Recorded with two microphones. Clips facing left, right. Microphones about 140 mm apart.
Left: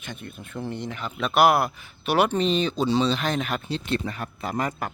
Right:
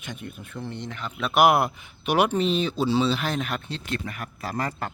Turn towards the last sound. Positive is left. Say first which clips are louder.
# left 2 dB
turn(degrees=15)  # may be behind; listen again after turning